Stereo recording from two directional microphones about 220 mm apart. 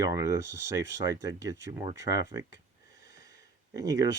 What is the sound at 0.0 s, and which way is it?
Speech, 15° right (ahead or behind).